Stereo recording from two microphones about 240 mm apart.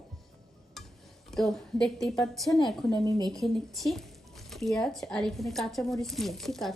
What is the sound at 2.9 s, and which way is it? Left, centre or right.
Speech, centre.